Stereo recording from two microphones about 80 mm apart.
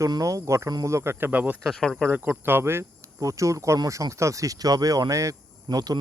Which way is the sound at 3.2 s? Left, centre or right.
Right.